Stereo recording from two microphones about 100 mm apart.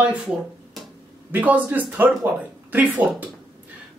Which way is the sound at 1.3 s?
20° right (ahead or behind).